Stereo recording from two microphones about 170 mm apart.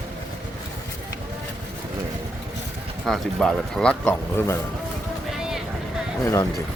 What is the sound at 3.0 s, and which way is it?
Speech, centre (ahead or behind).